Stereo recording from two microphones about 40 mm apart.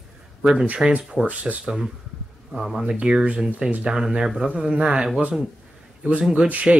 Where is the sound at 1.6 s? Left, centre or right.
Centre.